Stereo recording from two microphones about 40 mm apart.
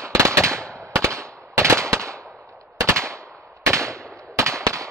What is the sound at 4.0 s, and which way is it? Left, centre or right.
Firecracker, centre.